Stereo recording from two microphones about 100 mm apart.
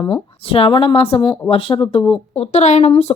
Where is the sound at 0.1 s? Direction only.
70° left (ahead or behind).